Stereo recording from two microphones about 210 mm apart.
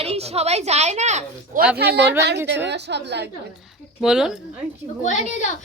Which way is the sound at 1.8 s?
50° right (ahead or behind).